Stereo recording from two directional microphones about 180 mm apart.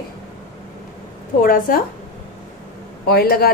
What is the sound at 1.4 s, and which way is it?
Speech, 50° left (ahead or behind).